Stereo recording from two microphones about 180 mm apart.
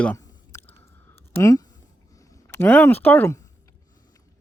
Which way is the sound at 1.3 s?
15° left (ahead or behind).